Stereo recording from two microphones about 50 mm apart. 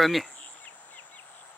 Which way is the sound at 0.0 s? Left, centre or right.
Centre.